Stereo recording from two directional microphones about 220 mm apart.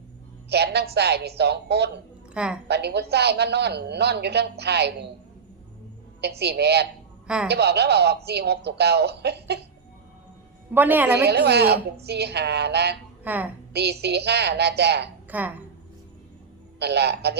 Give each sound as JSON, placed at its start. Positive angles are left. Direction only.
{"t": 0.5, "sound": "a man's voice", "side_deg": -50}
{"t": 2.3, "sound": "a woman's voice", "side_deg": -5}
{"t": 2.6, "sound": "a man's voice", "side_deg": -50}
{"t": 6.2, "sound": "a man's voice", "side_deg": -50}
{"t": 10.8, "sound": "a woman's voice", "side_deg": -10}
{"t": 11.3, "sound": "a man's voice", "side_deg": -50}
{"t": 13.2, "sound": "a woman's voice", "side_deg": -10}
{"t": 14.0, "sound": "a man's voice", "side_deg": -50}
{"t": 15.3, "sound": "a woman's voice", "side_deg": -5}
{"t": 16.8, "sound": "a man's voice", "side_deg": -50}